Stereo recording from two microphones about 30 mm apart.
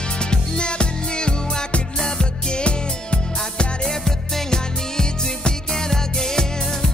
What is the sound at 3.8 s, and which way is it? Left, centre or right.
Music, centre.